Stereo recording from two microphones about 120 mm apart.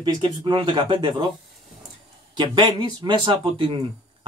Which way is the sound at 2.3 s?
40° right (ahead or behind).